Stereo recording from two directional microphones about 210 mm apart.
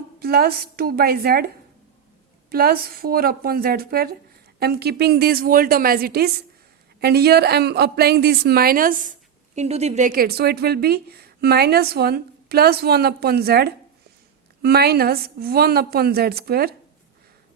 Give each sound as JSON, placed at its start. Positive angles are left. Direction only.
{"t": 0.2, "sound": "a woman's voice", "side_deg": -45}
{"t": 2.5, "sound": "a woman's voice", "side_deg": -45}
{"t": 9.6, "sound": "a woman's voice", "side_deg": -30}